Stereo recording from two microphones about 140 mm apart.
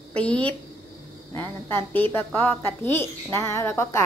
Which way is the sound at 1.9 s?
15° left (ahead or behind).